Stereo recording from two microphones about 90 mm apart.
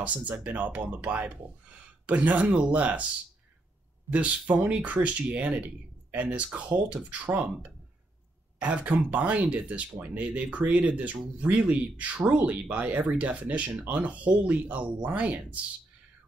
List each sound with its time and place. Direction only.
0.0 s speech: 15° right (ahead or behind)
4.1 s speech: 15° right (ahead or behind)
8.5 s speech: 15° right (ahead or behind)